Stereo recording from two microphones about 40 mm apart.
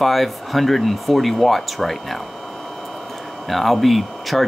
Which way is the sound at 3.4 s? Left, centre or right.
Centre.